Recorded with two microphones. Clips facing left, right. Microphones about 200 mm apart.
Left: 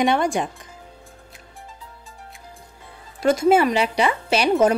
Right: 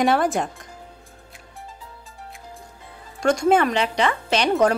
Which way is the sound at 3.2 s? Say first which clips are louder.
Left 2 dB; 5° left (ahead or behind).